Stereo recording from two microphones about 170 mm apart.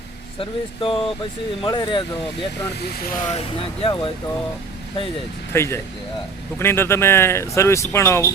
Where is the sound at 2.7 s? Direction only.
70° left (ahead or behind).